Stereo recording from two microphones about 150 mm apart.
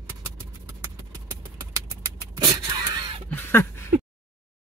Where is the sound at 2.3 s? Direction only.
30° right (ahead or behind).